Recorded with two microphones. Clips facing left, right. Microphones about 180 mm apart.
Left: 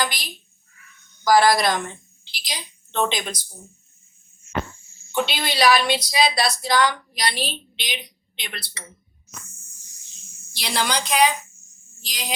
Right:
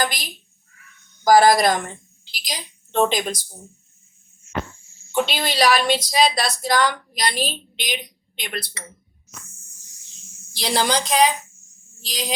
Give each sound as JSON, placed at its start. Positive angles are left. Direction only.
{"t": 0.0, "sound": "a sound", "side_deg": -45}
{"t": 1.2, "sound": "a woman's voice", "side_deg": -45}
{"t": 5.3, "sound": "a woman's voice", "side_deg": -45}
{"t": 10.5, "sound": "a woman's voice", "side_deg": -35}